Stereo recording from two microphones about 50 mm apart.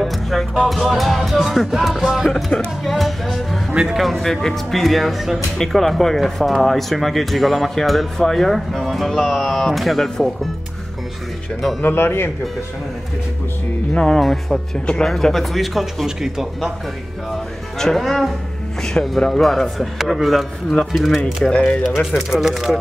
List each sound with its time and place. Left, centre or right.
0.0 s music: centre
0.7 s speech: centre
2.8 s music: centre
3.7 s speech: centre
4.0 s speech: centre
11.8 s speech: left
13.9 s speech: centre
14.2 s speech: centre
17.3 s speech: centre
21.5 s speech: centre
22.3 s speech: centre